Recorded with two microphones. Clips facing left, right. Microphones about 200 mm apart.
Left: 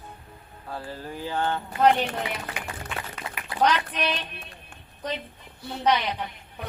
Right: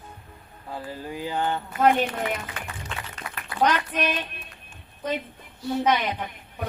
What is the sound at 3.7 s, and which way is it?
Speech, 50° right (ahead or behind).